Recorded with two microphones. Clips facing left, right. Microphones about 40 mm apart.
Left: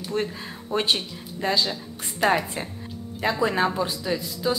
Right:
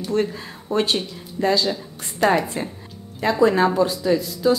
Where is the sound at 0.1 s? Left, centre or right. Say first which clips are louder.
Right 5 dB; centre.